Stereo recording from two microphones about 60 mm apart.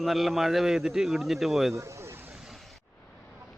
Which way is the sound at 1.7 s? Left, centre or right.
Right.